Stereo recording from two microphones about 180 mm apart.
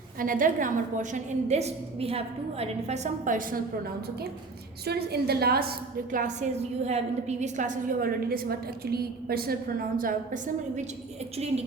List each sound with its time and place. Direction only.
0.2 s a woman's voice: 50° right (ahead or behind)
4.9 s a woman's voice: 60° right (ahead or behind); by 10.8 s 45° right (ahead or behind)
11.3 s a woman's voice: 35° right (ahead or behind)